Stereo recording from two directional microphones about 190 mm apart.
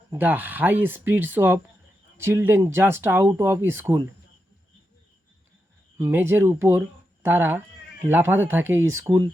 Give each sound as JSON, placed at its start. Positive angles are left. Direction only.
{"t": 0.1, "sound": "speech", "side_deg": -10}
{"t": 6.0, "sound": "speech", "side_deg": -10}